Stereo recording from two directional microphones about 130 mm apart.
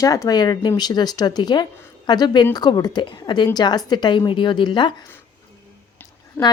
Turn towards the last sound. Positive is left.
turn(degrees=15)  # may be behind; listen again after turning